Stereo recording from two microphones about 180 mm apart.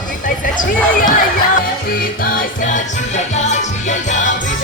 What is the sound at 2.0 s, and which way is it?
Music, 50° left (ahead or behind).